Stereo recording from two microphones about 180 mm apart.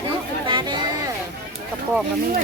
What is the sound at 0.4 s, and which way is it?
Chatter, 25° right (ahead or behind).